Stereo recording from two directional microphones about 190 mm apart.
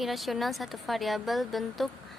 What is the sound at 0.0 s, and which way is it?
A woman's voice, centre (ahead or behind).